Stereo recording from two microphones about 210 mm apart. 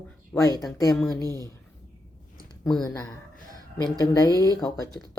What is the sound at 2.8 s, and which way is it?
Speech, 15° left (ahead or behind).